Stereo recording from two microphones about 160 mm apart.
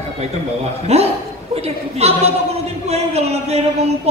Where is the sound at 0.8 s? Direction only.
40° right (ahead or behind).